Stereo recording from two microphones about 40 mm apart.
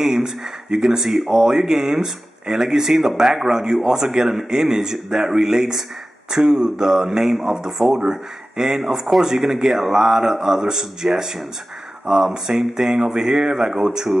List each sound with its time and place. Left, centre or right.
0.0 s speech: centre